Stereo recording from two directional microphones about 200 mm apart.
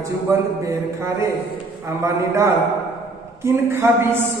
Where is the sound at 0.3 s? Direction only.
15° right (ahead or behind).